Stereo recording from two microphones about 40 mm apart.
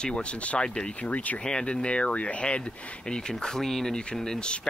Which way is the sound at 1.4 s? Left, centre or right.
Centre.